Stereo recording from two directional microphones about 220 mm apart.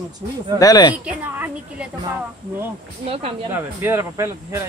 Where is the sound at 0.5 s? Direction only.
15° left (ahead or behind).